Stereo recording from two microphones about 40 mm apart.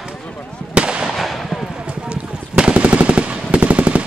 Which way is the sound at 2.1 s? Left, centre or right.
Right.